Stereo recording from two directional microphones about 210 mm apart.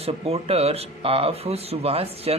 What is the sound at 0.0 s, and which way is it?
A man's voice, 30° right (ahead or behind).